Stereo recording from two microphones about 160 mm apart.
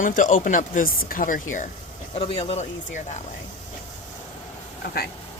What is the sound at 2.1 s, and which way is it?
Speech, 40° left (ahead or behind).